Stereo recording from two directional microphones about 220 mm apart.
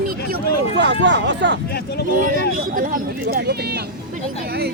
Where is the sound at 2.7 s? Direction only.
40° right (ahead or behind).